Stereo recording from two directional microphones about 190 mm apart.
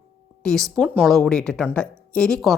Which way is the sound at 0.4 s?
Centre (ahead or behind).